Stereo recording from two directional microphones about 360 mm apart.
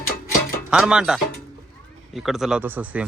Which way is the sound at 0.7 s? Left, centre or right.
Centre.